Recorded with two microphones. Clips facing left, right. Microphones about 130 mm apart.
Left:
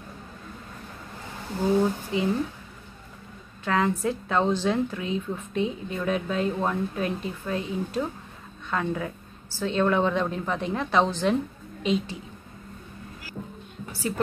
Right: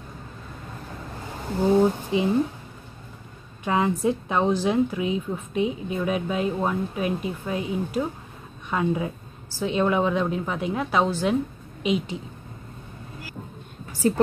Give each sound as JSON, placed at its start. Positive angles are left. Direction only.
{"t": 1.8, "sound": "speech", "side_deg": -20}
{"t": 3.6, "sound": "a woman's voice", "side_deg": -15}
{"t": 13.9, "sound": "a woman's voice", "side_deg": -40}